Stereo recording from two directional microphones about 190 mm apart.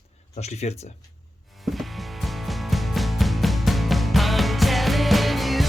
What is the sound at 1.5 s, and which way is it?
Music, centre (ahead or behind).